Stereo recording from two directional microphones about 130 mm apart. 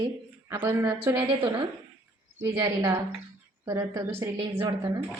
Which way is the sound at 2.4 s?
25° right (ahead or behind).